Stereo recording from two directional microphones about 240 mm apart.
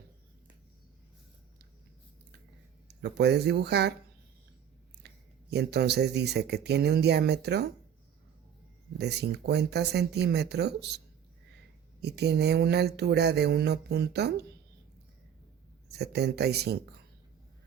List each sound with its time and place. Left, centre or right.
2.8 s speech: right
5.0 s speech: right
9.0 s speech: right
12.0 s speech: right
15.9 s speech: right